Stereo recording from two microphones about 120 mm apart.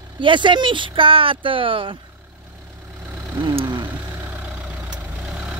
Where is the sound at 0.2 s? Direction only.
40° right (ahead or behind).